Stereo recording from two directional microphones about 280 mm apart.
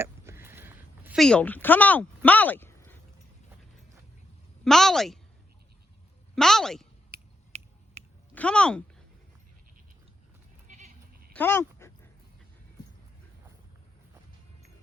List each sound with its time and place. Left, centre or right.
0.0 s a sound: centre
4.6 s a woman's voice: centre
6.3 s a woman's voice: centre
7.1 s finger snapping: right
8.4 s a woman's voice: centre
10.7 s goat: right
11.3 s dog: centre